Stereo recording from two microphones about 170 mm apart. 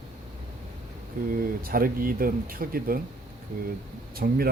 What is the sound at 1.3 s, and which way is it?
Speech, 60° right (ahead or behind).